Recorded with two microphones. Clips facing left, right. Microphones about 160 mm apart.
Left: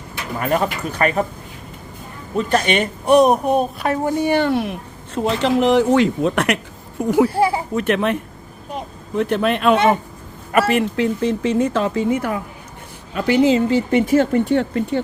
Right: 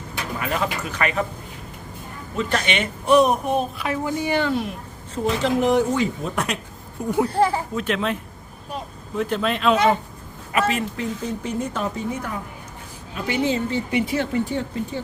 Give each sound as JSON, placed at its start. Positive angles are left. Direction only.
{"t": 0.3, "sound": "speech", "side_deg": 45}
{"t": 2.5, "sound": "speech", "side_deg": 45}
{"t": 7.3, "sound": "speech", "side_deg": 10}
{"t": 7.8, "sound": "speech", "side_deg": 60}
{"t": 13.1, "sound": "speech", "side_deg": 75}
{"t": 13.9, "sound": "speech", "side_deg": 50}
{"t": 14.4, "sound": "speech", "side_deg": 70}